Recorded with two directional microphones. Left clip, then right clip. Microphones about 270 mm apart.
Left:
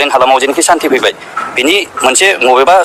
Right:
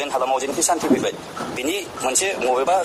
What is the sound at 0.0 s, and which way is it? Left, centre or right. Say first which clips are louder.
A man's voice: left 13 dB; left.